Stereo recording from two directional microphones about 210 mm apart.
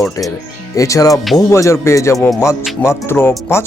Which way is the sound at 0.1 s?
15° left (ahead or behind).